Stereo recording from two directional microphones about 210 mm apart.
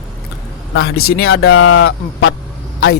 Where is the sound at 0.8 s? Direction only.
50° left (ahead or behind).